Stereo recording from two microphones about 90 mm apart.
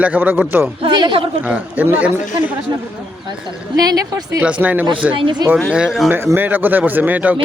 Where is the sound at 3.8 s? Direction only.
45° right (ahead or behind).